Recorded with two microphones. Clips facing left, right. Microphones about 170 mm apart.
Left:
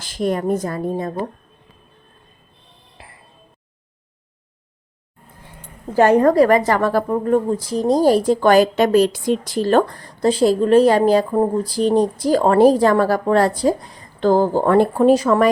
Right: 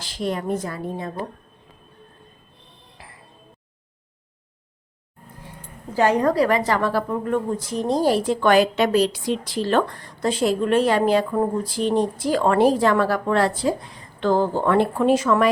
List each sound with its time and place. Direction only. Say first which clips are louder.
0.0 s a woman's voice: left 5 dB; 50° left (ahead or behind)
6.0 s a woman's voice: left 6 dB; 50° left (ahead or behind); by 15.4 s 35° left (ahead or behind)